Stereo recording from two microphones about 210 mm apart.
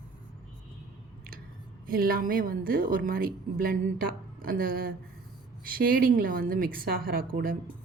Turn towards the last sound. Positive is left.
turn(degrees=-45)  # may be behind; listen again after turning